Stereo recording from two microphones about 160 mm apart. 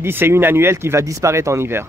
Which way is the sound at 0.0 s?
15° right (ahead or behind).